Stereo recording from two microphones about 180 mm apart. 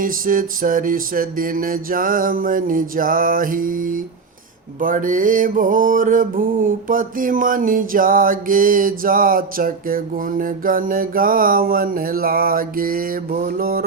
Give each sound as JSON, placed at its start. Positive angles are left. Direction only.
{"t": 0.0, "sound": "music", "side_deg": -50}